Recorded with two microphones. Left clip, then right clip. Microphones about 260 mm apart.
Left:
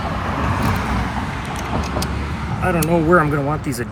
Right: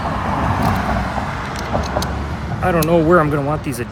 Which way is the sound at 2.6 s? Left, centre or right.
Centre.